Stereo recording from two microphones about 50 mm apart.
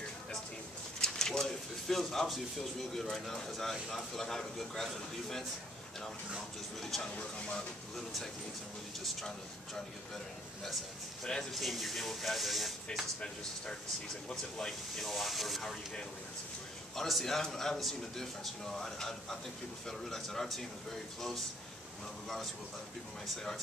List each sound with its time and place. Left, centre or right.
0.9 s speech: centre
6.8 s speech: centre
7.2 s speech: left
11.5 s speech: centre
13.2 s speech: centre
15.6 s speech: centre